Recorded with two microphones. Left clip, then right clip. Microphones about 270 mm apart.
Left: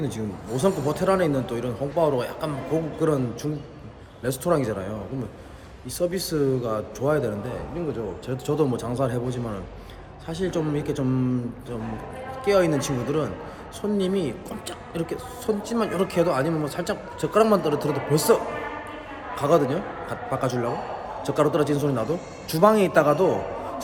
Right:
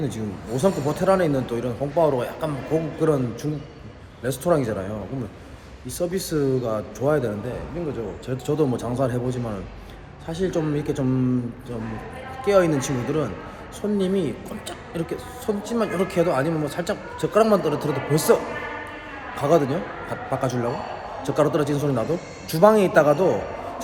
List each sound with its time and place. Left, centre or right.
0.0 s speech: centre
6.0 s speech: centre
12.5 s speech: centre
19.4 s speech: centre